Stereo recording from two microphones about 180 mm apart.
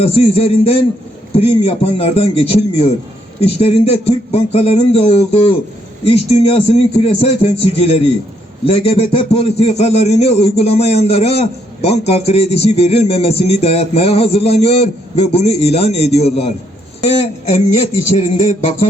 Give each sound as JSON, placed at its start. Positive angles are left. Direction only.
{"t": 0.0, "sound": "a man's voice", "side_deg": 35}